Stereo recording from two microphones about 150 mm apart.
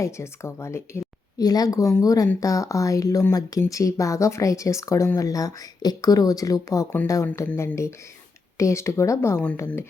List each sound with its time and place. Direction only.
0.0 s a woman's voice: 20° left (ahead or behind)